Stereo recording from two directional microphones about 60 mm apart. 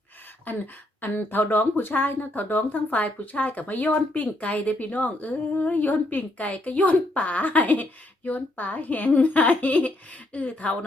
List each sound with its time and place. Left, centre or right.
1.0 s speech: left